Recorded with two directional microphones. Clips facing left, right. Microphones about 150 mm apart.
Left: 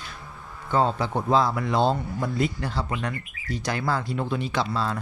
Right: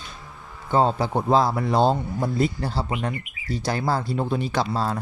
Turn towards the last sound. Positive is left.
turn(degrees=-40)  # may be behind; listen again after turning